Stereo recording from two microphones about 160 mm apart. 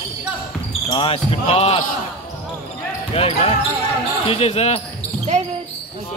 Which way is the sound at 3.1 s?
40° left (ahead or behind).